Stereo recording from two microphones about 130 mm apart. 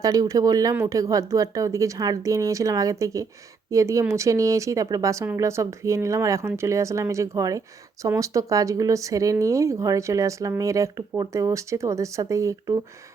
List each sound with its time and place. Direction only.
0.0 s speech: 25° right (ahead or behind)